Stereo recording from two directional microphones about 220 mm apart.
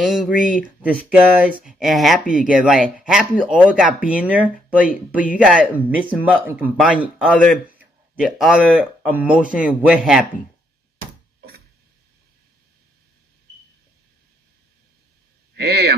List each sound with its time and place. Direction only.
0.0 s speech: centre (ahead or behind)
15.5 s speech: 45° right (ahead or behind)